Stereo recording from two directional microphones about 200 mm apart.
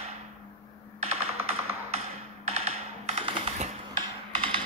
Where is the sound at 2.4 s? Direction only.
35° right (ahead or behind).